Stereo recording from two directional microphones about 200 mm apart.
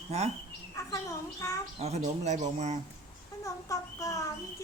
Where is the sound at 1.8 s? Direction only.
30° right (ahead or behind).